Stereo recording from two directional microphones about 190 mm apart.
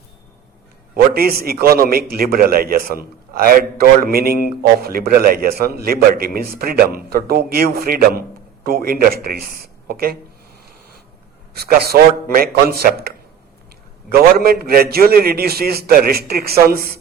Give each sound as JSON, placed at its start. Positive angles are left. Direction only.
{"t": 0.9, "sound": "a man's voice", "side_deg": -55}
{"t": 11.5, "sound": "a man's voice", "side_deg": -55}